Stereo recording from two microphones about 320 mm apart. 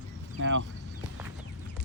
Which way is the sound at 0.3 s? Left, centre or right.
Right.